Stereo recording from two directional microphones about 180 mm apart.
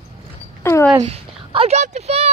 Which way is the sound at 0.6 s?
15° left (ahead or behind).